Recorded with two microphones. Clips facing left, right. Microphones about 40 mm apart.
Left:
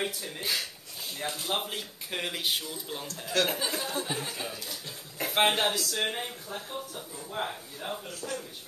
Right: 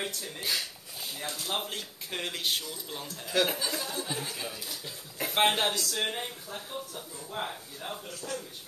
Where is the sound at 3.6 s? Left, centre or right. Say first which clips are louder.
Left 2 dB; centre.